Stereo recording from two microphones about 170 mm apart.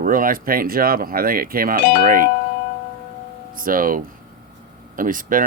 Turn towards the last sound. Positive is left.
turn(degrees=-50)  # may be behind; listen again after turning